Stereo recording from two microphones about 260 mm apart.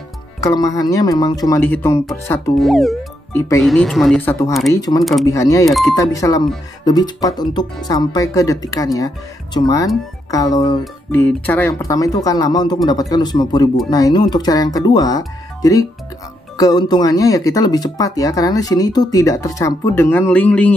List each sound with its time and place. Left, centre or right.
0.4 s speech: centre
5.7 s speech: centre
5.9 s speech: centre